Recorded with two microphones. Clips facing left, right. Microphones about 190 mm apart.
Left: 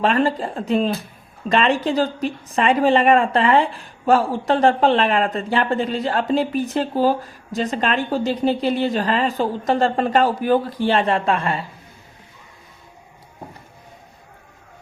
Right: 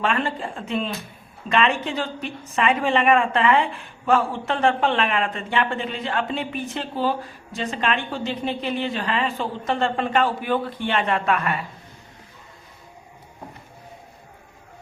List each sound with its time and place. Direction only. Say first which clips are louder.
0.0 s a woman's voice: left 6 dB; 35° left (ahead or behind)